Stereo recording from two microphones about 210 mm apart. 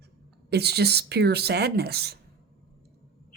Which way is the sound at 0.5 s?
50° right (ahead or behind).